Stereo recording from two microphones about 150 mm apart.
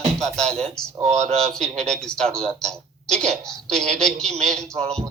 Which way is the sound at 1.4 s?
5° left (ahead or behind).